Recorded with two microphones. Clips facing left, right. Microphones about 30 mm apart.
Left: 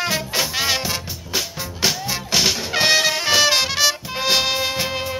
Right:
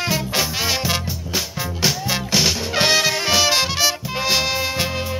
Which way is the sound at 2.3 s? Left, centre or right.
Centre.